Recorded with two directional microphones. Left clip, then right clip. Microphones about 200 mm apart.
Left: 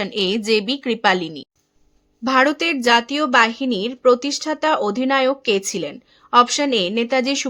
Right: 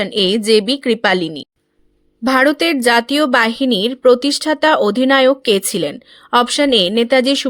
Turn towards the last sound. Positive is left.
turn(degrees=-20)  # may be behind; listen again after turning